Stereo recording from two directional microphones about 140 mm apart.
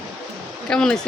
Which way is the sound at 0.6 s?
5° left (ahead or behind).